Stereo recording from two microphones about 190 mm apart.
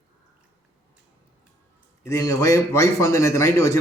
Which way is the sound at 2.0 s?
20° left (ahead or behind).